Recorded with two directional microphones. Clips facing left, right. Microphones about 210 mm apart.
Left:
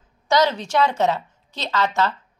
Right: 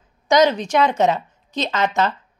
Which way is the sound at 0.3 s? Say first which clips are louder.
Right 4 dB; 15° right (ahead or behind).